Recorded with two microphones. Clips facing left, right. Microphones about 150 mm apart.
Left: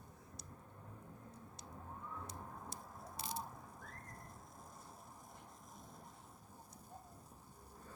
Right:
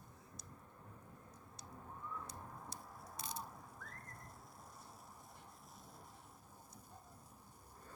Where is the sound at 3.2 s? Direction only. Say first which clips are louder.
Left 3 dB; 25° left (ahead or behind).